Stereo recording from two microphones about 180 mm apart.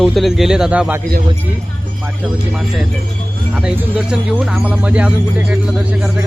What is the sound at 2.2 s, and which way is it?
Speech, centre (ahead or behind).